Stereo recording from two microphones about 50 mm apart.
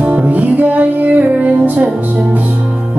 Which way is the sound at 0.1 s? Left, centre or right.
Right.